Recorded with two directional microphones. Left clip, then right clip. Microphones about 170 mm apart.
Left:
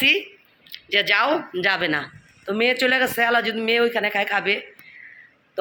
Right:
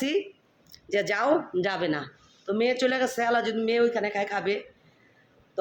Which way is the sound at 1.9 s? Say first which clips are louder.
Left 6 dB; 5° left (ahead or behind).